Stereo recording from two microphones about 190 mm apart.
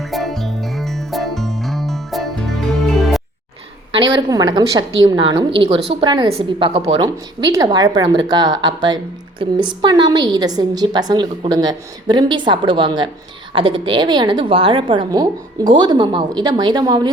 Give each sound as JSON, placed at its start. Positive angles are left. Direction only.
{"t": 0.0, "sound": "music", "side_deg": 0}
{"t": 3.9, "sound": "a woman's voice", "side_deg": -25}